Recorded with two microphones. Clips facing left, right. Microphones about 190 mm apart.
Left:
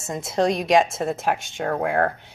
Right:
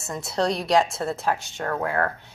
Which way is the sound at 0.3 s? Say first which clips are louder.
Left 3 dB; 20° left (ahead or behind).